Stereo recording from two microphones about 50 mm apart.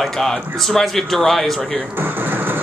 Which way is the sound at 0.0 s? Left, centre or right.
Centre.